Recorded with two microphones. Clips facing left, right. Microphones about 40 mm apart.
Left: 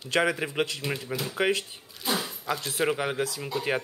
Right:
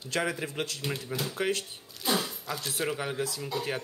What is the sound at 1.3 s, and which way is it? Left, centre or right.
Speech, left.